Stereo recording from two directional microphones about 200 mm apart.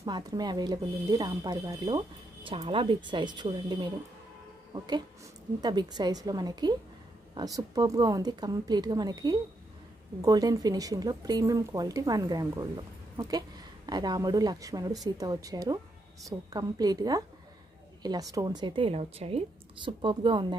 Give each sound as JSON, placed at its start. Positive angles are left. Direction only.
{"t": 0.0, "sound": "a woman's voice", "side_deg": -20}
{"t": 18.3, "sound": "speech", "side_deg": -20}